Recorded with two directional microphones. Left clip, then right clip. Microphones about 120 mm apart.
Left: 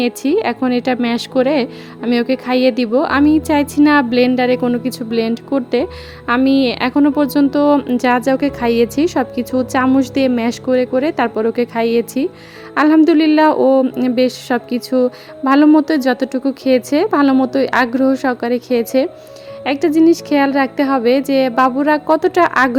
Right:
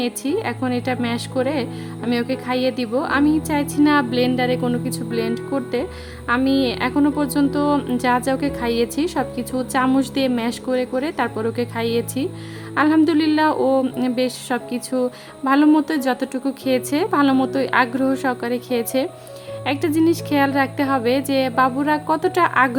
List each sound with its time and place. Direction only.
0.0 s a woman's voice: 60° left (ahead or behind)